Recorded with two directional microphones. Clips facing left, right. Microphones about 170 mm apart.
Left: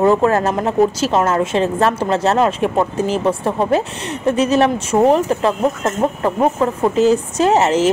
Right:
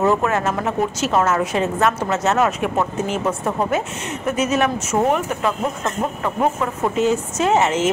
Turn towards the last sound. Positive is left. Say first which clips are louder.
# left 4 dB
turn(degrees=35)  # may be behind; listen again after turning